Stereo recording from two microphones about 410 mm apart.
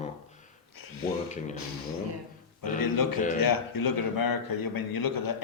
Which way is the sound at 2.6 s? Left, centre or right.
Left.